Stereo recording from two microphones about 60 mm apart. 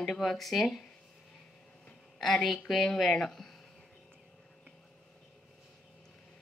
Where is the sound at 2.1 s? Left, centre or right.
Centre.